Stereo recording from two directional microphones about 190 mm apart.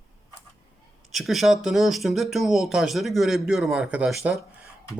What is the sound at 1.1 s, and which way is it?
Speech, centre (ahead or behind).